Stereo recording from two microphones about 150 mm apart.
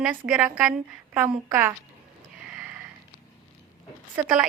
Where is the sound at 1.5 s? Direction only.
15° right (ahead or behind).